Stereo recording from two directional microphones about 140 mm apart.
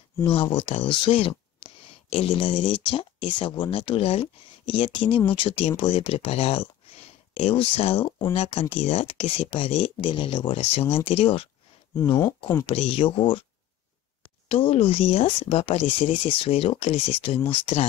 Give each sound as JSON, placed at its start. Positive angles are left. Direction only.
{"t": 0.2, "sound": "speech", "side_deg": 40}
{"t": 12.6, "sound": "speech", "side_deg": 45}
{"t": 14.5, "sound": "speech", "side_deg": 40}